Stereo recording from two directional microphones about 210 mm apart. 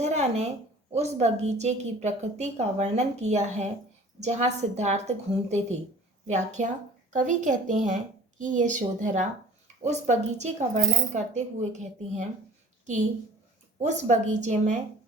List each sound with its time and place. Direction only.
0.0 s a sound: 30° right (ahead or behind)
0.9 s a woman's voice: 30° right (ahead or behind)
13.8 s a woman's voice: 35° right (ahead or behind)